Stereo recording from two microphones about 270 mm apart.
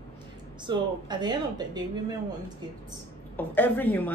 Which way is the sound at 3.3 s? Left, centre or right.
Centre.